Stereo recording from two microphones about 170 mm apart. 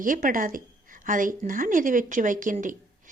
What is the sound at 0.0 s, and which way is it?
A woman's voice, 55° right (ahead or behind).